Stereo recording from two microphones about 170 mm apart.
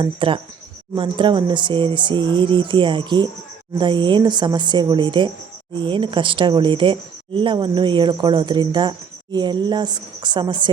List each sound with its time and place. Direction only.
0.0 s a woman's voice: 30° right (ahead or behind)